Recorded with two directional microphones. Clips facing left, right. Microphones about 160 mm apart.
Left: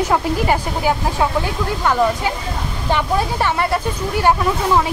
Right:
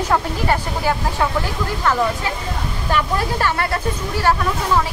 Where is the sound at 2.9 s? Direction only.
20° left (ahead or behind).